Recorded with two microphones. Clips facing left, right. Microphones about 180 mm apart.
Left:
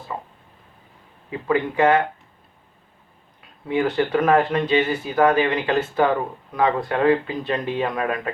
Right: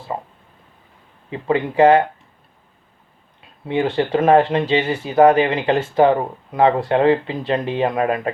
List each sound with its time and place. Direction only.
1.3 s speech: 25° right (ahead or behind)
3.7 s speech: 25° right (ahead or behind)